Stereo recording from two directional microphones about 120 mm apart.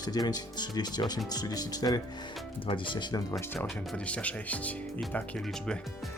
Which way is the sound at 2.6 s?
45° left (ahead or behind).